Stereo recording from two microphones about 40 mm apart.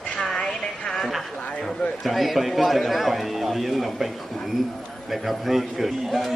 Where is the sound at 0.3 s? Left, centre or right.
Centre.